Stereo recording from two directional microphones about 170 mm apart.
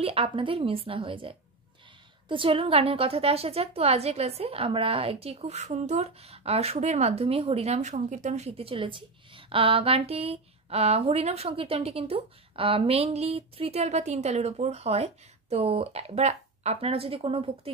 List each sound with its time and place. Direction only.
0.0 s a woman's voice: 35° right (ahead or behind)